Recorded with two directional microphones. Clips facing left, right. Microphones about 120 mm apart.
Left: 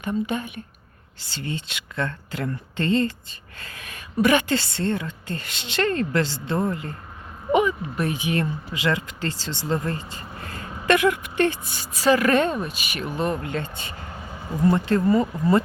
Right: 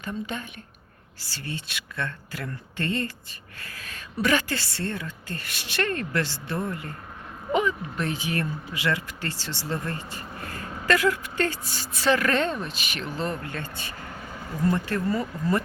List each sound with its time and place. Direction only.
0.0 s a woman's voice: 15° left (ahead or behind)
7.5 s speech: 10° left (ahead or behind)